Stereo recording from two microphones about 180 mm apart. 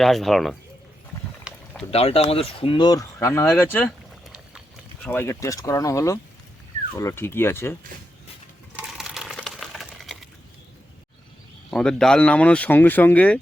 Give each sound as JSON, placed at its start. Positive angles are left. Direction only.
{"t": 0.0, "sound": "speech", "side_deg": 0}
{"t": 1.5, "sound": "boat", "side_deg": 5}
{"t": 1.9, "sound": "speech", "side_deg": 35}
{"t": 3.8, "sound": "boat", "side_deg": -5}
{"t": 5.0, "sound": "speech", "side_deg": 15}
{"t": 8.7, "sound": "sewing machine", "side_deg": -5}
{"t": 11.7, "sound": "speech", "side_deg": 5}